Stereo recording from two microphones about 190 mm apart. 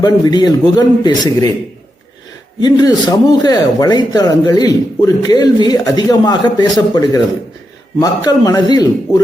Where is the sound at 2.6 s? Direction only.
20° left (ahead or behind).